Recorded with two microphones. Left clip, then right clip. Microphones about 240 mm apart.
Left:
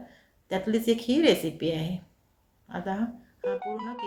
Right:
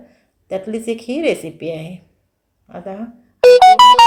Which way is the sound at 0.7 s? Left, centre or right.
Left.